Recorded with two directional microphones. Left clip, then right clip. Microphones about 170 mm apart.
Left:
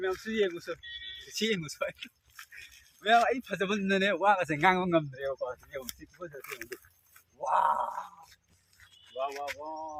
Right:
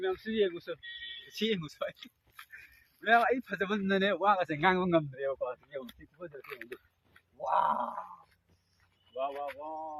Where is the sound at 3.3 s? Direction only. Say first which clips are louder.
Left 1 dB; 90° left; by 4.6 s 50° left (ahead or behind).